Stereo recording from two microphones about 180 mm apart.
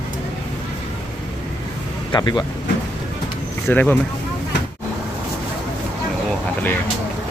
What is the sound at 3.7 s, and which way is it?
Speech, 10° left (ahead or behind).